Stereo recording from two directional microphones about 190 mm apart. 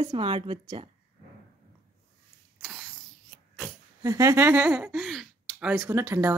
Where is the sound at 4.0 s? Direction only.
15° right (ahead or behind).